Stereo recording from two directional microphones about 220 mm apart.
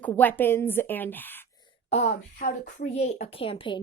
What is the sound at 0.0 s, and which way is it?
Speech, 10° left (ahead or behind).